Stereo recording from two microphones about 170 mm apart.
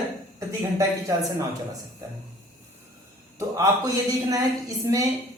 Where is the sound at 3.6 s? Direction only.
20° right (ahead or behind).